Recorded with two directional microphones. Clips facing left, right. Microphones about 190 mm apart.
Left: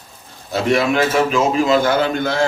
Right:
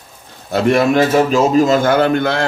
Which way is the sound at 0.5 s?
50° right (ahead or behind).